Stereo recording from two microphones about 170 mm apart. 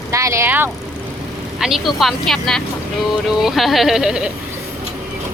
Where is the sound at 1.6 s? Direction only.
Centre (ahead or behind).